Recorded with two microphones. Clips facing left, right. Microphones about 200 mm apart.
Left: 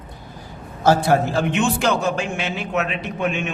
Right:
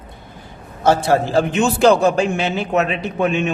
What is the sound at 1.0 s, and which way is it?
A man's voice, 30° right (ahead or behind).